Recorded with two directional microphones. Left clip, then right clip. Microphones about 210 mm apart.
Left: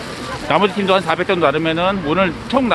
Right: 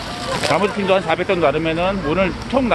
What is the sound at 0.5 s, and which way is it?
Speech, 25° left (ahead or behind).